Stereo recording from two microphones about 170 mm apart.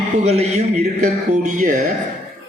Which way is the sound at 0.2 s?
40° right (ahead or behind).